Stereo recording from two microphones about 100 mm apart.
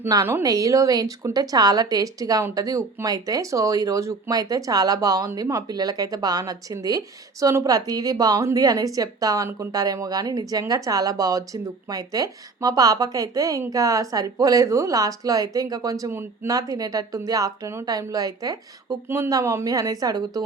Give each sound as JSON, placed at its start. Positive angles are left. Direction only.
{"t": 0.1, "sound": "speech", "side_deg": -35}
{"t": 16.5, "sound": "speech", "side_deg": -35}
{"t": 19.0, "sound": "speech", "side_deg": -20}